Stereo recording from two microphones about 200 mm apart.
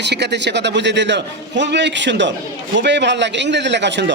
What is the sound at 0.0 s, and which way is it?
A man's voice, 60° right (ahead or behind).